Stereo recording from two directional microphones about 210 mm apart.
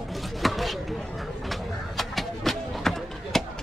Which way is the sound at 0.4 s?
Centre (ahead or behind).